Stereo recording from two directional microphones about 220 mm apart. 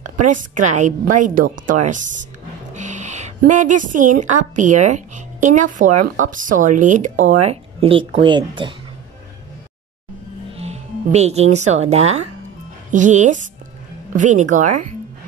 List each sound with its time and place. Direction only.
0.0 s a woman's voice: 35° right (ahead or behind)
10.5 s speech: 30° right (ahead or behind)